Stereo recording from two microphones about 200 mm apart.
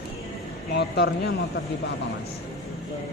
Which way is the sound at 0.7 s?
55° left (ahead or behind).